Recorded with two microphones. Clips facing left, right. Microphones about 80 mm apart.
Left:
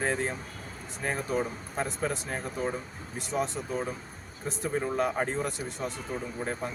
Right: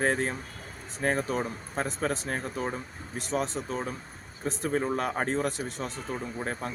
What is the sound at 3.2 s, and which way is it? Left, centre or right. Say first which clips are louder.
Speech: right 1 dB; right.